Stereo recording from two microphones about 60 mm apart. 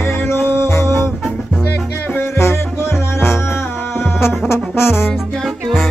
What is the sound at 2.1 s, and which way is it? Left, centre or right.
Music, left.